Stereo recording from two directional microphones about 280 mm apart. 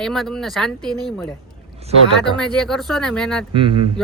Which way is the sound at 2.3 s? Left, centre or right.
Centre.